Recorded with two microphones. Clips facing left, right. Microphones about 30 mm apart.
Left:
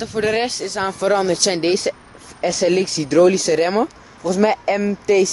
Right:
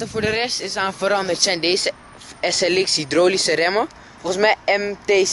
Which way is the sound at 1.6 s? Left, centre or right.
Right.